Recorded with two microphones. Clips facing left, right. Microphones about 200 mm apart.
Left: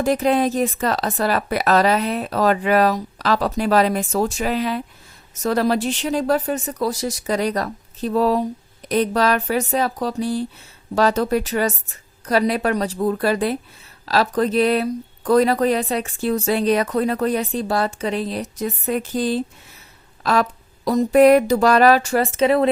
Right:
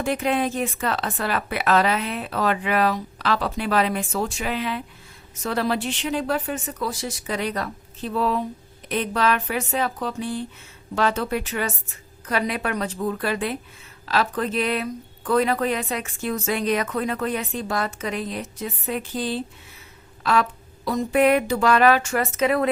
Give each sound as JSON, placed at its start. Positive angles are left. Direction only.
{"t": 0.0, "sound": "speech", "side_deg": 40}